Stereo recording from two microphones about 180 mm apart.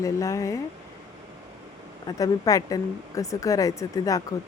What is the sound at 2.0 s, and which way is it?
Speech, 20° left (ahead or behind).